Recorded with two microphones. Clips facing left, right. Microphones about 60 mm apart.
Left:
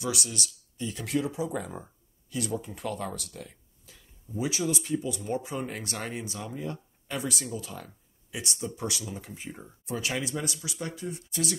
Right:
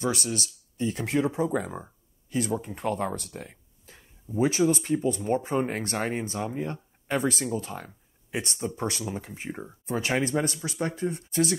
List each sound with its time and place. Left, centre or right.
0.0 s speech: right
2.2 s a sound: right
2.6 s speech: right